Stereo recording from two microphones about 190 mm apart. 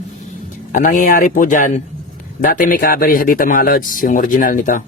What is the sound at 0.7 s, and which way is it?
Speech, 45° left (ahead or behind).